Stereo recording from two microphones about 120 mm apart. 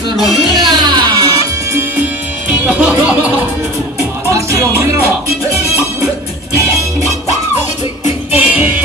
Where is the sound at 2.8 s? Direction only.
10° right (ahead or behind).